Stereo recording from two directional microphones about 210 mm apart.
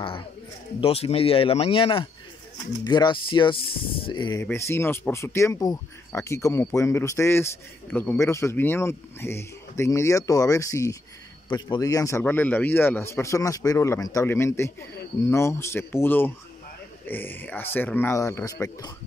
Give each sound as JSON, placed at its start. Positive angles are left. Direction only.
{"t": 0.7, "sound": "a man's voice", "side_deg": 25}